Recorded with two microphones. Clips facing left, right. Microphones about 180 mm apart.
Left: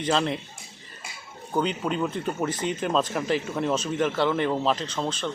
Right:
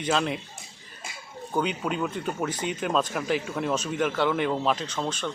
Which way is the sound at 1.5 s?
Centre (ahead or behind).